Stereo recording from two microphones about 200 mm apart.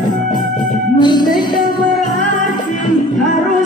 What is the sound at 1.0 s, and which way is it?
Music, 20° left (ahead or behind).